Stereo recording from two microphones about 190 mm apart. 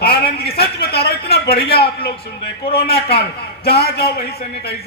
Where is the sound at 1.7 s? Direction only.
55° left (ahead or behind).